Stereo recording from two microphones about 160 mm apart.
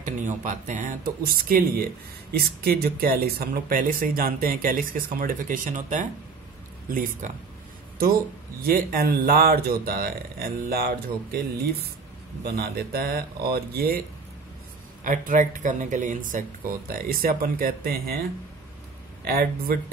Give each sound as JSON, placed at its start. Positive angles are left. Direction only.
{"t": 0.0, "sound": "speech", "side_deg": -55}
{"t": 8.6, "sound": "speech", "side_deg": -70}
{"t": 12.4, "sound": "speech", "side_deg": -75}
{"t": 15.0, "sound": "speech", "side_deg": -55}
{"t": 19.2, "sound": "speech", "side_deg": -70}